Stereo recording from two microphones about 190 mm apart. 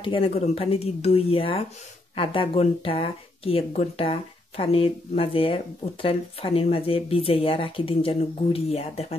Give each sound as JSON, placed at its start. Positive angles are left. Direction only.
{"t": 0.0, "sound": "speech", "side_deg": 30}